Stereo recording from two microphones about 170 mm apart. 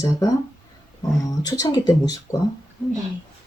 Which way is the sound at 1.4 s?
20° left (ahead or behind).